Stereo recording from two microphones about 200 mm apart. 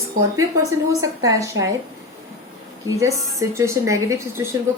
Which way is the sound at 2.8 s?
15° right (ahead or behind).